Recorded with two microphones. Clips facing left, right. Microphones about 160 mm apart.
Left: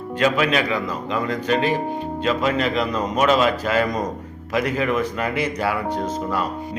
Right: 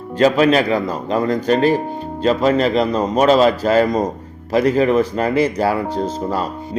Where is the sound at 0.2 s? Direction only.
35° right (ahead or behind).